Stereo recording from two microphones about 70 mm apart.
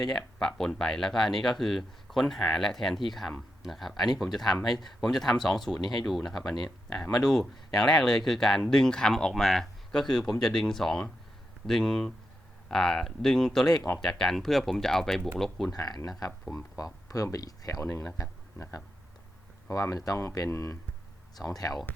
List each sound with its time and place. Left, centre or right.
0.1 s speech: centre
15.7 s speech: left
16.5 s speech: left
18.2 s speech: left
21.4 s speech: left